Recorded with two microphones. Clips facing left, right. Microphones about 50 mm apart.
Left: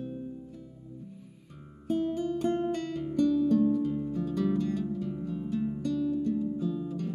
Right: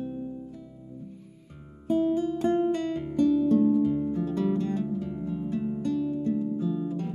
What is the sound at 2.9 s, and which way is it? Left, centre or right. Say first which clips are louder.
Music: right 3 dB; right.